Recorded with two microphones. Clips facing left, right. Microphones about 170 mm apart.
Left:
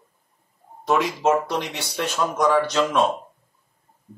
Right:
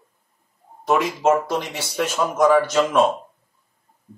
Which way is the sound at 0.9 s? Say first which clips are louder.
Right 2 dB; 5° right (ahead or behind).